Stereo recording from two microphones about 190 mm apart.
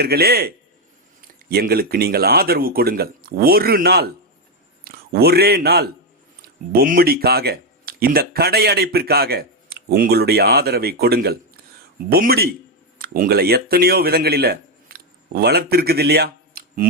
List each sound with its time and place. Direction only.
0.0 s a man's voice: 55° right (ahead or behind)